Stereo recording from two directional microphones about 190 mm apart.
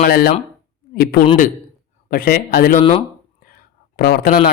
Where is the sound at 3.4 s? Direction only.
50° left (ahead or behind).